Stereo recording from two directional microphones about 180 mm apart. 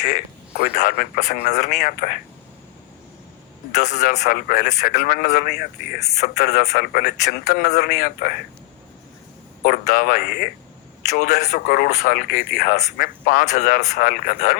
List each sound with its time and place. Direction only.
0.0 s speech: 45° left (ahead or behind)
3.8 s speech: 45° left (ahead or behind)
9.6 s speech: 50° left (ahead or behind)
11.1 s speech: 45° left (ahead or behind)